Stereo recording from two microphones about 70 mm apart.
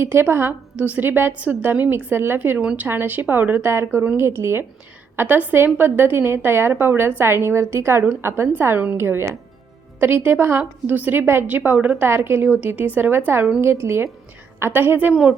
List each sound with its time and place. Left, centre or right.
0.0 s a woman's voice: right
0.8 s a woman's voice: right
2.6 s speech: centre
2.8 s a woman's voice: right
3.7 s a woman's voice: right
5.1 s a woman's voice: right
9.0 s a woman's voice: right
12.0 s a woman's voice: right
15.1 s speech: centre